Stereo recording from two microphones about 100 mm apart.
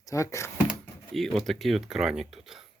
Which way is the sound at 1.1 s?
Centre (ahead or behind).